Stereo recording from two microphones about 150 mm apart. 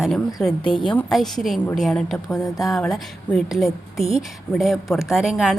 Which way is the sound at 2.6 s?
Centre (ahead or behind).